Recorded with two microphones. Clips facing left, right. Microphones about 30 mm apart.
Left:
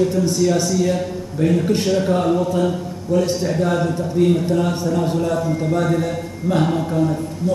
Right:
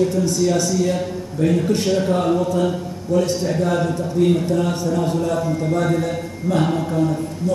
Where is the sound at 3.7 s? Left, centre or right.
Centre.